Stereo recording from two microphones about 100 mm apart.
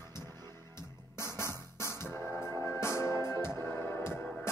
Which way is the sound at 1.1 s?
25° left (ahead or behind).